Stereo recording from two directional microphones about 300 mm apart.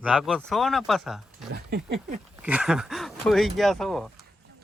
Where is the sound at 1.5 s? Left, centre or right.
Right.